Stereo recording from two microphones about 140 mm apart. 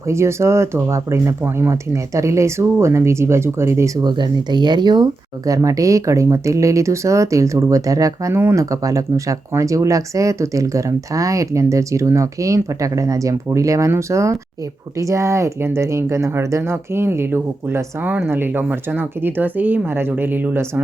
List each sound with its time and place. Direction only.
0.1 s speech: 20° right (ahead or behind)